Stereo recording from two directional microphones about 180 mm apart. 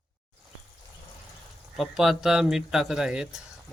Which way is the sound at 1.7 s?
Centre (ahead or behind).